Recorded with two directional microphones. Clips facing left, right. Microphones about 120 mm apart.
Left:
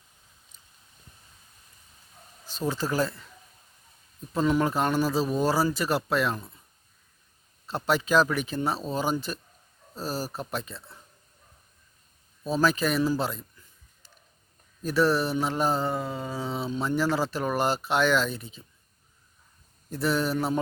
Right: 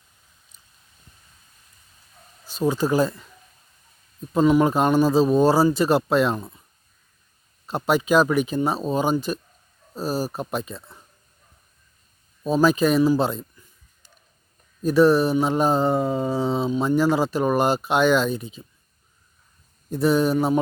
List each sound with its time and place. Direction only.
2.5 s mantra: 15° right (ahead or behind)
4.4 s speech: 15° right (ahead or behind)
7.7 s mantra: 15° right (ahead or behind)
12.4 s speech: 15° right (ahead or behind)
14.8 s mantra: 15° right (ahead or behind)
19.9 s mantra: 15° right (ahead or behind)